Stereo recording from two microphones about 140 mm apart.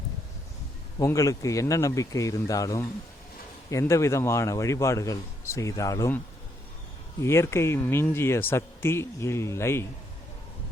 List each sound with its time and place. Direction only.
0.9 s speech: 25° left (ahead or behind)